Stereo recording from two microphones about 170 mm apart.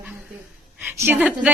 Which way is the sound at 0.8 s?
10° right (ahead or behind).